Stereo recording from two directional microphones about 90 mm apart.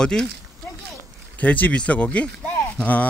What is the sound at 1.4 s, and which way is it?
Speech, 15° left (ahead or behind).